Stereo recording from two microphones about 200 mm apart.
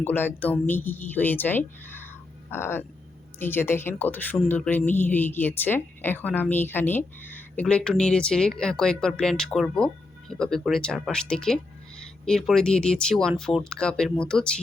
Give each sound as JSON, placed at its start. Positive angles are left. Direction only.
{"t": 0.0, "sound": "a woman's voice", "side_deg": 10}